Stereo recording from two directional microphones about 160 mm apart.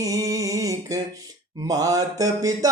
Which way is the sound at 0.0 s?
20° right (ahead or behind).